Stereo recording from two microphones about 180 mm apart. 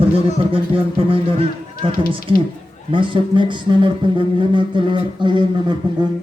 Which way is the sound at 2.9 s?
25° right (ahead or behind).